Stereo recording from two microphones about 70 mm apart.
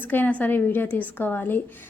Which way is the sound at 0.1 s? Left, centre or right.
Left.